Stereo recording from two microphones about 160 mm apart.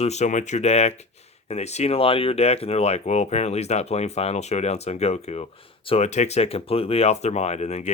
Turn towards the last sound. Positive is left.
turn(degrees=45)  # may be behind; listen again after turning